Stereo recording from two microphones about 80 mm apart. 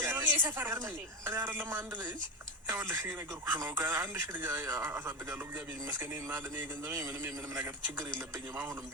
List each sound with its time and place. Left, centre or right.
0.0 s a sound: right
1.2 s speech: right
7.5 s speech: right